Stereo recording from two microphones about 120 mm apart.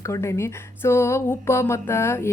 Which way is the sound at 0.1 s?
25° left (ahead or behind).